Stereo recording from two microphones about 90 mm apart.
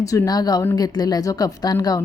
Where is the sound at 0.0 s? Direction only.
40° left (ahead or behind).